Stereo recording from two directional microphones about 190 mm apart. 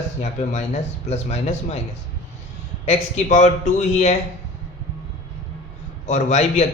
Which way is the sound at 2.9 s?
35° left (ahead or behind).